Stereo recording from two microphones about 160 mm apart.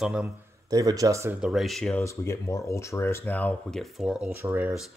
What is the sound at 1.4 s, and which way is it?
Speech, 5° right (ahead or behind).